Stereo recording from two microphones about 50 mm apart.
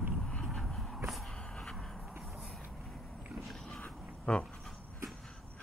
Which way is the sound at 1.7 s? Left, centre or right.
Centre.